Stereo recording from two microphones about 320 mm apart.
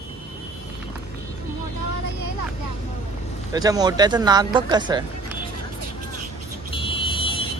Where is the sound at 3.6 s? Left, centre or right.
Centre.